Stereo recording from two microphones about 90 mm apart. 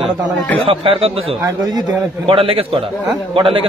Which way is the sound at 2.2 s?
90° right.